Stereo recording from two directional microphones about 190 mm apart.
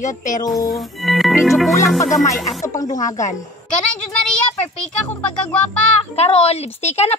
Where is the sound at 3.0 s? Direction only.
40° left (ahead or behind).